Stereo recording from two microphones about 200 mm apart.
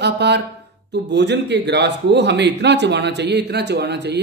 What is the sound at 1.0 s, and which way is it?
Speech, 60° right (ahead or behind).